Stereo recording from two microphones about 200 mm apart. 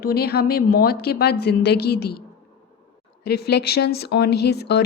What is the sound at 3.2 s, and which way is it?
Speech, 55° left (ahead or behind).